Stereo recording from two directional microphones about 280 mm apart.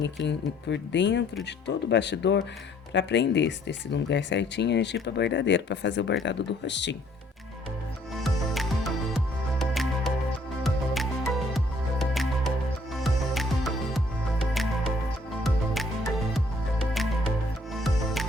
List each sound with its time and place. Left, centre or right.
0.0 s speech: left
8.1 s music: centre